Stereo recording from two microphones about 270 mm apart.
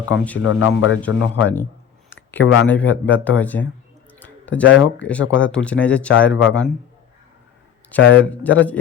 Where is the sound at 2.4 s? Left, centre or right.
Left.